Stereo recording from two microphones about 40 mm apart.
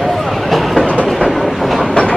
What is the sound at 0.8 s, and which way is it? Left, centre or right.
Train, left.